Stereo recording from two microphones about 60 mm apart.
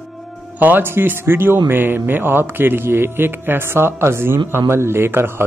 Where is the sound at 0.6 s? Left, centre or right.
Right.